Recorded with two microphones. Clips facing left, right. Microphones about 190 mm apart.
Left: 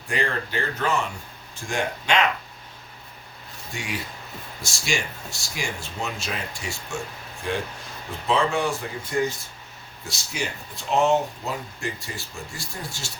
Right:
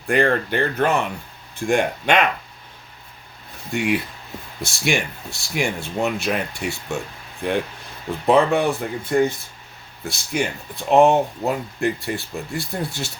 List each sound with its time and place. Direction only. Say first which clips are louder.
0.1 s speech: right 8 dB; 60° right (ahead or behind)
3.7 s speech: right 11 dB; 60° right (ahead or behind)
8.3 s speech: right 6 dB; 60° right (ahead or behind)